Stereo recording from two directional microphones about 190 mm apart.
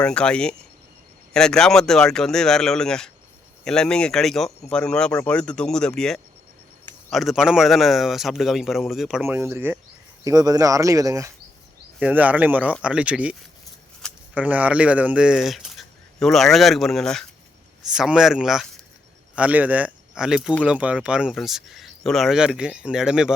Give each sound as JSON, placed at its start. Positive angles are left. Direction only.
{"t": 0.0, "sound": "speech", "side_deg": 5}
{"t": 11.9, "sound": "speech", "side_deg": -5}
{"t": 14.3, "sound": "speech", "side_deg": -10}